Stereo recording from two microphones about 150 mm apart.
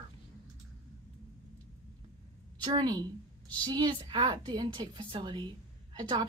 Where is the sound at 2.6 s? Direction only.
30° right (ahead or behind).